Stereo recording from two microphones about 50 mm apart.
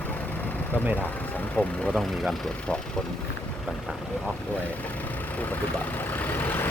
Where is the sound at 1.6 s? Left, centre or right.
Centre.